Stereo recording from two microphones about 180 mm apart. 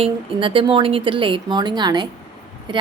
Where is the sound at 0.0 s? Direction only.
30° right (ahead or behind).